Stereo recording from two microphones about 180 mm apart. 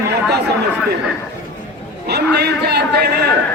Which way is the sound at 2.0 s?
65° right (ahead or behind).